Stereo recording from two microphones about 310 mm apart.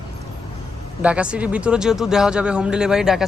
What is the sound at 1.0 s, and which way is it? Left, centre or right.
Speech, centre.